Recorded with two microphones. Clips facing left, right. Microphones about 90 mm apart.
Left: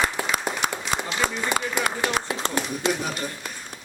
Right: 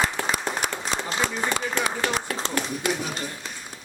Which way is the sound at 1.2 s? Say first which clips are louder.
Left 2 dB; 50° left (ahead or behind).